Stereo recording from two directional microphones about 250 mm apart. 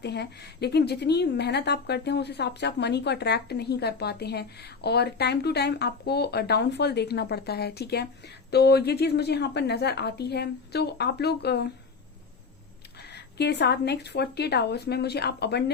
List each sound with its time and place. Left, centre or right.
0.0 s a woman's voice: left
13.1 s a woman's voice: left